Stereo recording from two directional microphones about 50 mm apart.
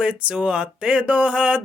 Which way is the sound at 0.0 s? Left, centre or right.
Centre.